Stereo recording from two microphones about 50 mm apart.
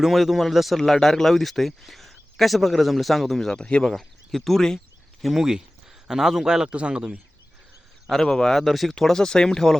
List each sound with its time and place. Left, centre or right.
0.0 s speech: centre
3.6 s speech: left
3.9 s speech: centre
5.2 s speech: centre
6.7 s speech: right
8.1 s speech: centre
8.5 s speech: centre